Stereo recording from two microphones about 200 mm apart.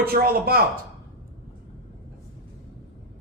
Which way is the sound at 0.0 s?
50° right (ahead or behind).